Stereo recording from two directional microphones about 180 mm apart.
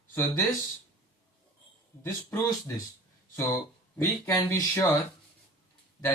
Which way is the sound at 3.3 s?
15° left (ahead or behind).